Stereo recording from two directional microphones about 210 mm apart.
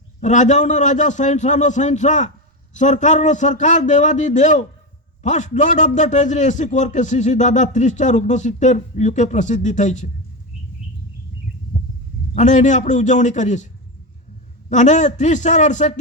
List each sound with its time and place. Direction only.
0.2 s a man's voice: 35° left (ahead or behind)
12.3 s a man's voice: 35° left (ahead or behind)
14.7 s a man's voice: 35° left (ahead or behind)